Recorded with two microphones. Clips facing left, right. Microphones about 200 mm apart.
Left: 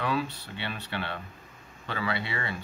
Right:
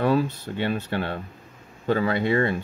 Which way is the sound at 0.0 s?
45° right (ahead or behind).